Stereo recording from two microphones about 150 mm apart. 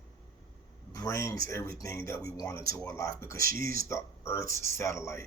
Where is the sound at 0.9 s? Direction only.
20° left (ahead or behind).